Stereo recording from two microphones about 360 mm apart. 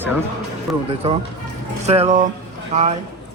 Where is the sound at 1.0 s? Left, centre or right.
Centre.